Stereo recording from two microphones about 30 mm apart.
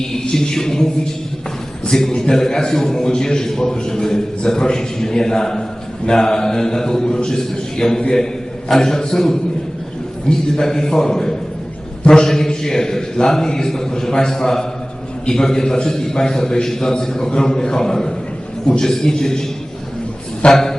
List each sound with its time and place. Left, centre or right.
0.0 s a man's voice: left
1.8 s a sound: left
2.1 s a man's voice: left
20.5 s a man's voice: centre